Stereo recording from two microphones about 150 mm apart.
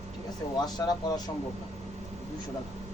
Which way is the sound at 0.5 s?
25° left (ahead or behind).